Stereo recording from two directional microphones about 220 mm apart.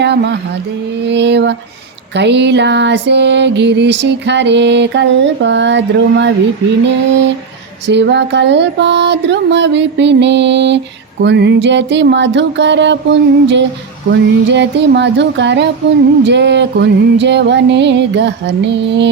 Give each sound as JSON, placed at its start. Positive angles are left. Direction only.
{"t": 0.0, "sound": "music", "side_deg": -50}